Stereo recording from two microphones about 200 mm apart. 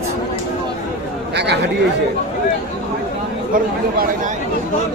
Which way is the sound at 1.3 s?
60° right (ahead or behind).